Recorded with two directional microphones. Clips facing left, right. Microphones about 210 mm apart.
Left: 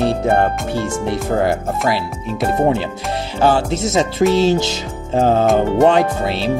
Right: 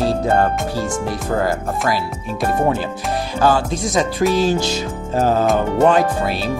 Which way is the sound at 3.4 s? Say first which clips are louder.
Left 2 dB; 25° left (ahead or behind).